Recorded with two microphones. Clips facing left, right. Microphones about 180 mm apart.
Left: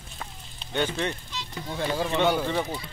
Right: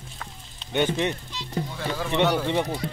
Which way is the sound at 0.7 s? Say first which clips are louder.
Right 4 dB; 20° right (ahead or behind).